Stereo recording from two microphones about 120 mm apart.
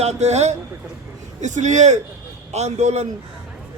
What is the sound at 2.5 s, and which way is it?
Speech, 65° right (ahead or behind).